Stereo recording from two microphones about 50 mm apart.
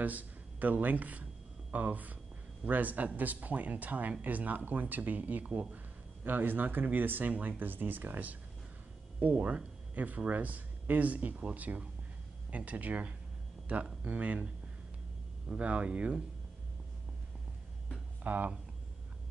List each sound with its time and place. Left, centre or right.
0.0 s speech: right
18.2 s speech: right